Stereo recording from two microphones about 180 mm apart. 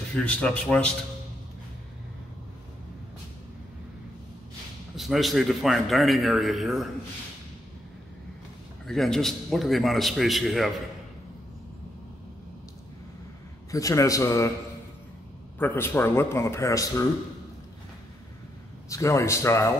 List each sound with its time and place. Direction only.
0.1 s a man's voice: 5° left (ahead or behind)
4.9 s a man's voice: centre (ahead or behind)
8.8 s a man's voice: centre (ahead or behind)
13.7 s a man's voice: 20° left (ahead or behind)
15.6 s a man's voice: 10° left (ahead or behind)
18.9 s a man's voice: 15° left (ahead or behind)